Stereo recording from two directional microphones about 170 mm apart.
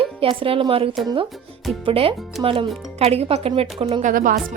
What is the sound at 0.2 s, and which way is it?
Speech, 30° right (ahead or behind).